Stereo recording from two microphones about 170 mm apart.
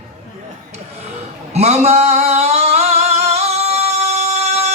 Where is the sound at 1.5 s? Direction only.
40° right (ahead or behind).